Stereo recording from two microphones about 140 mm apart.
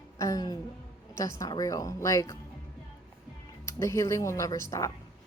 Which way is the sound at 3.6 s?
20° left (ahead or behind).